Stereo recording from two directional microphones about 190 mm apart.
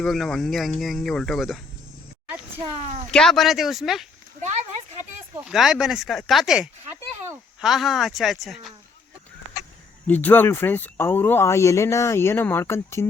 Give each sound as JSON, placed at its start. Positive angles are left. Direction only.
{"t": 0.0, "sound": "speech", "side_deg": 0}
{"t": 3.1, "sound": "speech", "side_deg": 5}
{"t": 4.4, "sound": "a sound", "side_deg": -35}
{"t": 5.5, "sound": "speech", "side_deg": 0}
{"t": 10.1, "sound": "speech", "side_deg": 10}